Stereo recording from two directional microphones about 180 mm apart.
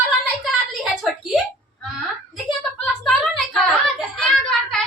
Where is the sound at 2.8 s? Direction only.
Centre (ahead or behind).